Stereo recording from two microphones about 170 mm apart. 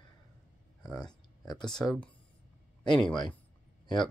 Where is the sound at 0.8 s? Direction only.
5° left (ahead or behind).